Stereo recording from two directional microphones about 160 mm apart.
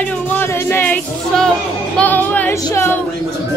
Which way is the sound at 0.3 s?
15° left (ahead or behind).